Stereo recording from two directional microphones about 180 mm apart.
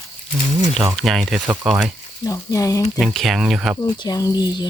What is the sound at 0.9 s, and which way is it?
Speech, centre (ahead or behind).